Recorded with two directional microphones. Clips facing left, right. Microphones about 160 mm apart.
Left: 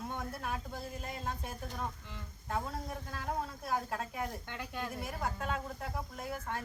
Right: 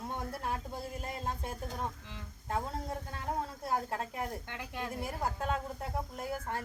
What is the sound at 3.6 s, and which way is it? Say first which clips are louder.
Speech: right 2 dB; 30° right (ahead or behind).